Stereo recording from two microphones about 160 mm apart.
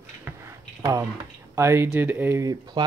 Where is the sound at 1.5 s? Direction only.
15° right (ahead or behind).